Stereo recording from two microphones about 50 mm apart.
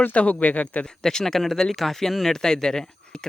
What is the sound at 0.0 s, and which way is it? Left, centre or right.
Speech, left.